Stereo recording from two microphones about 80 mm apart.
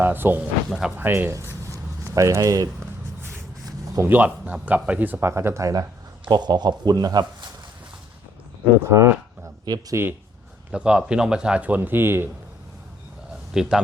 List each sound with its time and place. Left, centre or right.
0.0 s speech: right
0.7 s speech: centre
0.9 s speech: right
1.6 s a sound: right
4.0 s speech: right
5.2 s speech: right
6.2 s speech: right
8.8 s speech: right
10.7 s speech: centre; by 12.3 s right
13.5 s speech: centre